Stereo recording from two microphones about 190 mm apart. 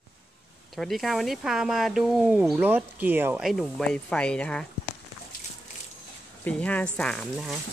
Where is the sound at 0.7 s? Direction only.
Centre (ahead or behind).